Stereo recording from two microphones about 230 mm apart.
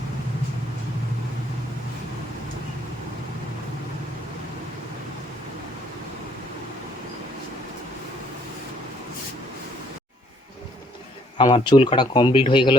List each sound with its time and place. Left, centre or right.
11.3 s speech: left